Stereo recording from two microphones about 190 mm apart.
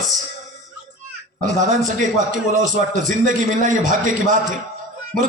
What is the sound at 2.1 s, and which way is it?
A man's voice, 40° right (ahead or behind).